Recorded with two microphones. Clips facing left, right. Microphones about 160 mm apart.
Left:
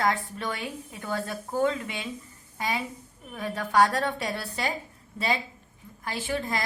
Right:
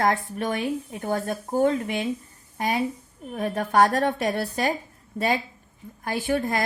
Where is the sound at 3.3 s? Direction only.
50° right (ahead or behind).